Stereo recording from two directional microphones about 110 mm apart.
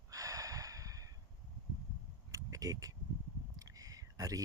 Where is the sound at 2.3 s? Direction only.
30° right (ahead or behind).